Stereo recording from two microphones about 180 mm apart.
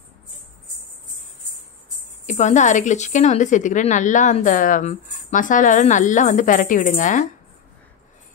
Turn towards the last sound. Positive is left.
turn(degrees=45)  # may be behind; listen again after turning